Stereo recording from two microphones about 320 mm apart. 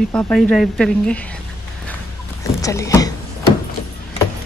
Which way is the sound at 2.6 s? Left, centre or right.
Centre.